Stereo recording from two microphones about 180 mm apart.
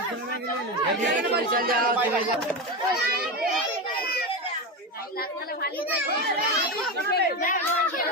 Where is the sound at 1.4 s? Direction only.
50° right (ahead or behind).